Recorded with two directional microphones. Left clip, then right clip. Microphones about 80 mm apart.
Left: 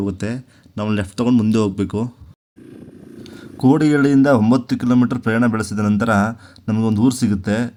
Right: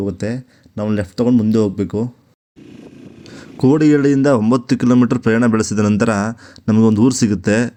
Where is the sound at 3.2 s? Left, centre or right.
Right.